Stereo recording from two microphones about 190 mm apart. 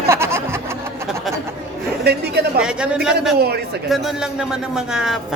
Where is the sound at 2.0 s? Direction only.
60° right (ahead or behind).